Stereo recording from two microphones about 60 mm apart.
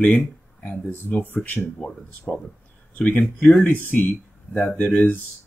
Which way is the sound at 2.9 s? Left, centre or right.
Left.